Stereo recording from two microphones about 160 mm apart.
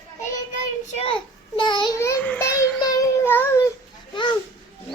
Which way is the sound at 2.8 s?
20° left (ahead or behind).